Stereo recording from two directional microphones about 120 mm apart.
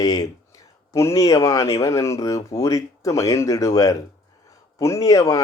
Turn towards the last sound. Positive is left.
turn(degrees=25)  # may be behind; listen again after turning